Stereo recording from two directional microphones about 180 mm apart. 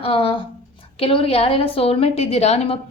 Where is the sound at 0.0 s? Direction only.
30° left (ahead or behind).